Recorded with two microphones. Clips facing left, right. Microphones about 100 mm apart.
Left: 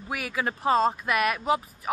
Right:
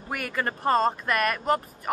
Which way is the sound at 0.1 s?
5° left (ahead or behind).